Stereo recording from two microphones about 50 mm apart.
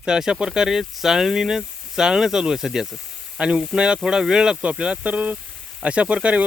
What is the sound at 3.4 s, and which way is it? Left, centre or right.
Speech, centre.